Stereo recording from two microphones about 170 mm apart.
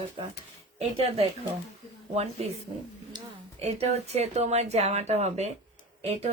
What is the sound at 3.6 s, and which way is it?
Speech, 40° right (ahead or behind).